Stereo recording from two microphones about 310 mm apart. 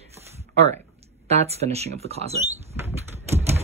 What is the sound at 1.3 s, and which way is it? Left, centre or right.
Speech, centre.